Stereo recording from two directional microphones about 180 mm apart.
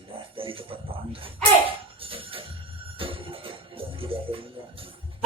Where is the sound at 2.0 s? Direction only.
30° right (ahead or behind).